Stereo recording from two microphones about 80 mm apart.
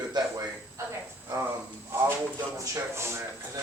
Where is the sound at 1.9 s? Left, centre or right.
Right.